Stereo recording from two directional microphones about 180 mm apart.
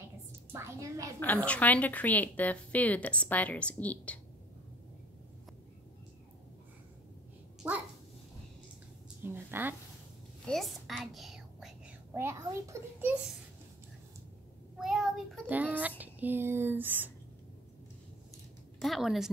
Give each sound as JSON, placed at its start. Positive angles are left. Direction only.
{"t": 0.5, "sound": "a woman's voice", "side_deg": -15}
{"t": 1.2, "sound": "a woman's voice", "side_deg": 10}
{"t": 7.6, "sound": "dog", "side_deg": -10}
{"t": 9.2, "sound": "a woman's voice", "side_deg": -10}
{"t": 10.4, "sound": "speech", "side_deg": 0}
{"t": 14.8, "sound": "child singing", "side_deg": 0}
{"t": 16.0, "sound": "a sound", "side_deg": -10}
{"t": 18.8, "sound": "a woman's voice", "side_deg": 0}